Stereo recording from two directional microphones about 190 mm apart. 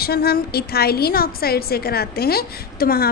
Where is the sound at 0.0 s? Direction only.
55° left (ahead or behind).